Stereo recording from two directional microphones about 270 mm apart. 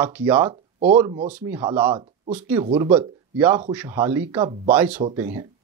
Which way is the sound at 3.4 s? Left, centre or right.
Centre.